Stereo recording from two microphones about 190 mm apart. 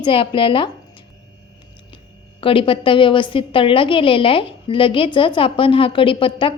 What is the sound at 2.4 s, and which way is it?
A woman's voice, 30° left (ahead or behind).